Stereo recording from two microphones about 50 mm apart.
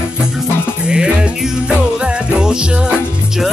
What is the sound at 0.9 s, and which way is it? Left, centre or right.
Music, centre.